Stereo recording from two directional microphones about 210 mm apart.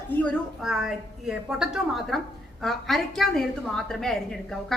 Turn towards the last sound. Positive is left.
turn(degrees=0)  # may be behind; listen again after turning